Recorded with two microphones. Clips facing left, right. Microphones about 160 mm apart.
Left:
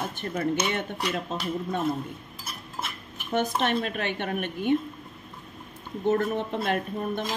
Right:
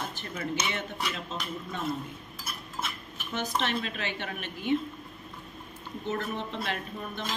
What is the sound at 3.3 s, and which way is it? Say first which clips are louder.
Speech: left 6 dB; 50° left (ahead or behind).